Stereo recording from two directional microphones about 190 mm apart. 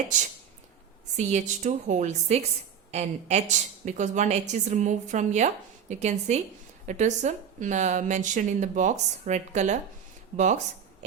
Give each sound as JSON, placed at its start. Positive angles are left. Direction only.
{"t": 1.1, "sound": "speech", "side_deg": -40}